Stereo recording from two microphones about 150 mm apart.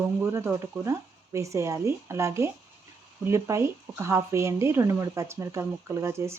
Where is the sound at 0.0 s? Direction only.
15° right (ahead or behind).